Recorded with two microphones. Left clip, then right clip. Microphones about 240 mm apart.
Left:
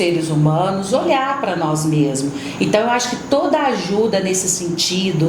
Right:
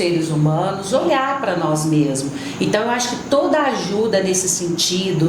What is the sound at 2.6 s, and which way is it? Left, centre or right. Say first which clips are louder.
A woman's voice: left 3 dB; left.